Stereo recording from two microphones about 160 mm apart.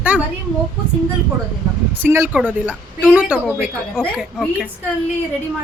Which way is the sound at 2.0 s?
15° right (ahead or behind).